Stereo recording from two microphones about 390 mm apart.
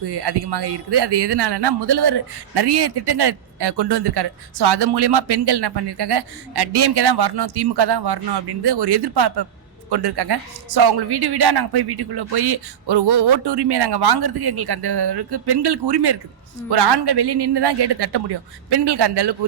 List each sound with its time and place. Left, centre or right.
0.0 s speech: right